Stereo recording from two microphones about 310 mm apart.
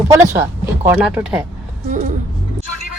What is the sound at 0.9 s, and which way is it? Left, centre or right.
Speech, centre.